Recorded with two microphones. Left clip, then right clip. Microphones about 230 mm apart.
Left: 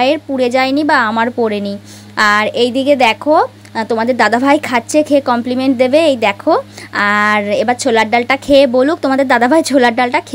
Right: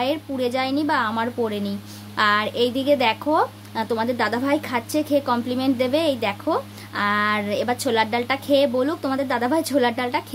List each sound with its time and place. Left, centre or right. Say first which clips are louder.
0.0 s a woman's voice: left 10 dB; left